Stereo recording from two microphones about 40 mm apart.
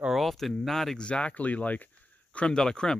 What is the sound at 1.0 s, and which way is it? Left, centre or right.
Speech, left.